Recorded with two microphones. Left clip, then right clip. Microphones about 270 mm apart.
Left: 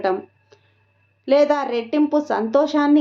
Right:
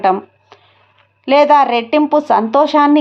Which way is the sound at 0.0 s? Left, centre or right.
Centre.